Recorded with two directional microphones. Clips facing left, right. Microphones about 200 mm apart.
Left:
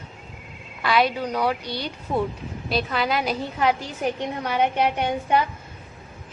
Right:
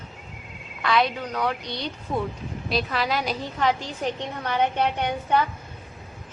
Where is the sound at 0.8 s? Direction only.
5° left (ahead or behind).